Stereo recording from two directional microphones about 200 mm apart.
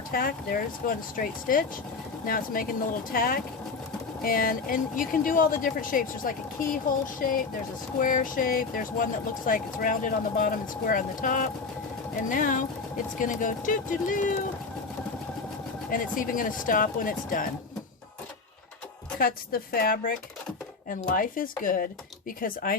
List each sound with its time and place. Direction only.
0.1 s speech: 45° left (ahead or behind)
15.9 s speech: 45° left (ahead or behind)
19.2 s speech: 50° left (ahead or behind)